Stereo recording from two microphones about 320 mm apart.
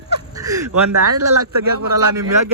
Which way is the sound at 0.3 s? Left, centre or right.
Centre.